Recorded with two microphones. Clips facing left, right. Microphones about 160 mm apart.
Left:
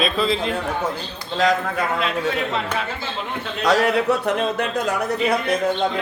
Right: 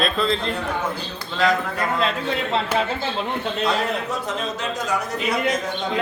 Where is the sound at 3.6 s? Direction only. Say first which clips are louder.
Left 9 dB; 85° left; by 4.9 s 60° left (ahead or behind).